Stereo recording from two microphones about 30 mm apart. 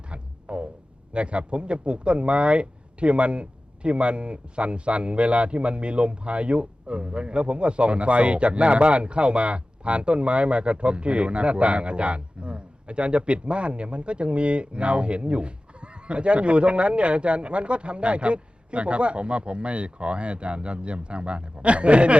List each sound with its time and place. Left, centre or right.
0.1 s music: right
1.1 s speech: right